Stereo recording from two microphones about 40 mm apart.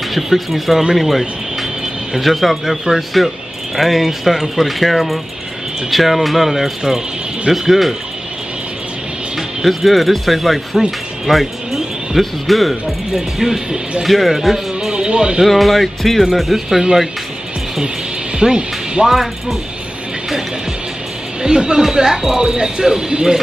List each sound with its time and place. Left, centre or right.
0.1 s speech: centre
9.7 s speech: centre
14.9 s music: centre
15.4 s speech: centre
18.4 s speech: centre
21.4 s speech: centre